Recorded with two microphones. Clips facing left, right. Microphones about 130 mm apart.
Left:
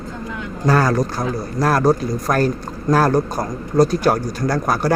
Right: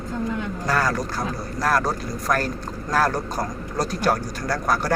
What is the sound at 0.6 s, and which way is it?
Speech, 30° left (ahead or behind).